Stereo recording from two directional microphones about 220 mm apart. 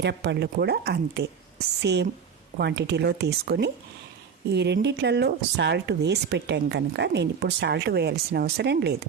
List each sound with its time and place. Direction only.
0.0 s speech: 50° right (ahead or behind)